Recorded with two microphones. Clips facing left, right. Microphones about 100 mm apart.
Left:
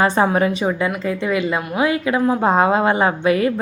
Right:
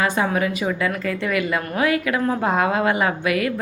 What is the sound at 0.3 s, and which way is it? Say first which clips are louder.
A woman's voice: left 4 dB; 30° left (ahead or behind).